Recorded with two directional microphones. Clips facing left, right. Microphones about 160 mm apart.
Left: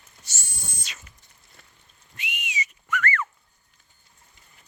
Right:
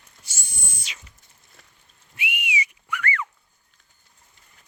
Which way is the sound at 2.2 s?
10° right (ahead or behind).